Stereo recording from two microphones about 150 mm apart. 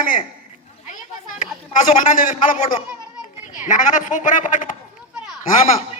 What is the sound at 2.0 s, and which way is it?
A man's voice, 60° left (ahead or behind).